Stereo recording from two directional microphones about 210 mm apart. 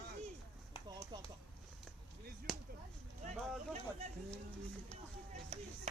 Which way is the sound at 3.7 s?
30° right (ahead or behind).